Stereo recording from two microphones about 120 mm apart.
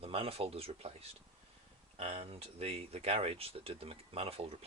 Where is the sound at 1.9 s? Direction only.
55° right (ahead or behind).